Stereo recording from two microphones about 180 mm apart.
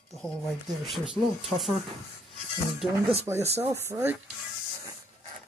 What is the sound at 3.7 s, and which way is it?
Speech, 15° right (ahead or behind).